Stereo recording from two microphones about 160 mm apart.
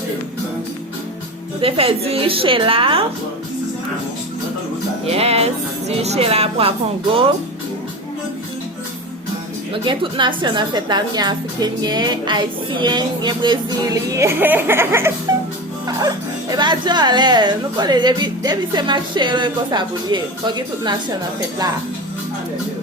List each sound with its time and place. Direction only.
1.6 s a woman's voice: 35° right (ahead or behind)
5.0 s a woman's voice: 40° right (ahead or behind)
9.8 s a woman's voice: 30° right (ahead or behind)